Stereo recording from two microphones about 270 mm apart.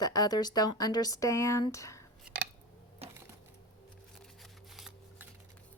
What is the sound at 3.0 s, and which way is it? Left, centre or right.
Typewriter, right.